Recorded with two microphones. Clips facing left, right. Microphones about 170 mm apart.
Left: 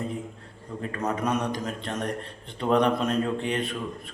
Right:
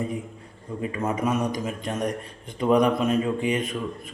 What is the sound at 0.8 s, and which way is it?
A man's voice, 10° right (ahead or behind).